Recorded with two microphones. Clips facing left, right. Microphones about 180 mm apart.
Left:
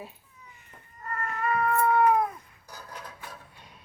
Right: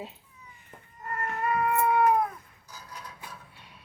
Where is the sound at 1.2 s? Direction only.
15° right (ahead or behind).